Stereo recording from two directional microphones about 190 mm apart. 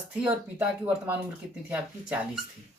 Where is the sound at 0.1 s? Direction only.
5° right (ahead or behind).